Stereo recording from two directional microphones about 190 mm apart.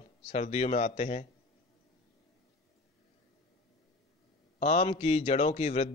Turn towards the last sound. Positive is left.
turn(degrees=35)  # may be behind; listen again after turning